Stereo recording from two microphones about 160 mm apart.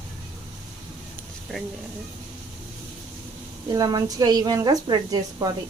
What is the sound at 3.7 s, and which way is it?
A woman's voice, 25° right (ahead or behind).